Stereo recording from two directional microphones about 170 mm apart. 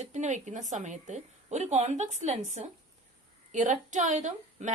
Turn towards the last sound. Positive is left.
turn(degrees=-45)  # may be behind; listen again after turning